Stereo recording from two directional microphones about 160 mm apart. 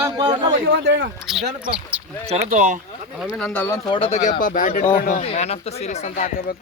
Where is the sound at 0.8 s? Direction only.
90° right.